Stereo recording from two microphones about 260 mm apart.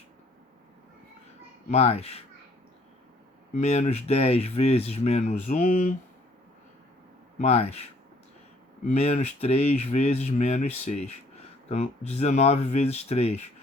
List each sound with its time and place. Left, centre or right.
1.7 s speech: left
3.5 s speech: left
7.3 s speech: left
8.9 s speech: left